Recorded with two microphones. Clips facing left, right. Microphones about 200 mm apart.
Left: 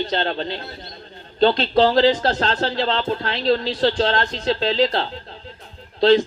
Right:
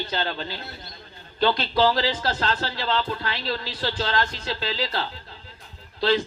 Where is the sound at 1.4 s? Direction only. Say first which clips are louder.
Left 5 dB; 30° left (ahead or behind).